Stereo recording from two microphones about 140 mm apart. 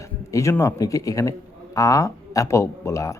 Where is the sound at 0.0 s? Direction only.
20° left (ahead or behind).